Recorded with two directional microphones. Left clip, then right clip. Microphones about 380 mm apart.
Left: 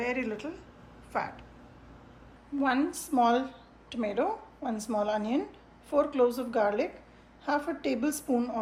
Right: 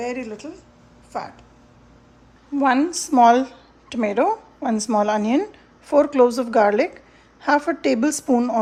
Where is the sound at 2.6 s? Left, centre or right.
Centre.